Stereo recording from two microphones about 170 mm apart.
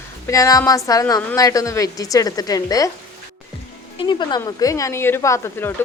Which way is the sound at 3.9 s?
25° left (ahead or behind).